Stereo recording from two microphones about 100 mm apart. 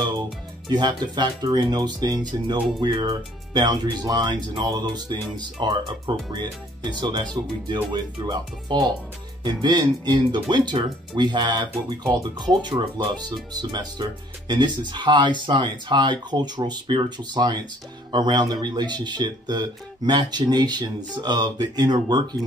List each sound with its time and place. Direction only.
0.7 s speech: 45° right (ahead or behind)